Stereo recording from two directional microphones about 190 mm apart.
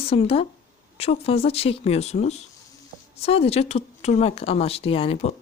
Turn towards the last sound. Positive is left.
turn(degrees=30)  # may be behind; listen again after turning